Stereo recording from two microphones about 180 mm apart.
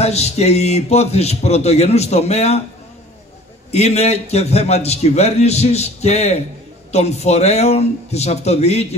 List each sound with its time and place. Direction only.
0.0 s a man's voice: 35° left (ahead or behind)
3.7 s a man's voice: 35° left (ahead or behind)